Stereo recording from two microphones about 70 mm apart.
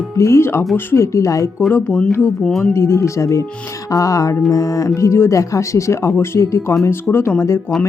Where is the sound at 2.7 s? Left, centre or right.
Left.